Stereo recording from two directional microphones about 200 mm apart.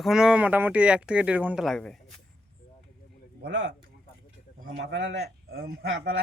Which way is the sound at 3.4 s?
60° right (ahead or behind).